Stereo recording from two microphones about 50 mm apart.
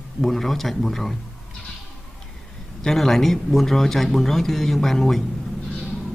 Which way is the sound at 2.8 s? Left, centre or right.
Centre.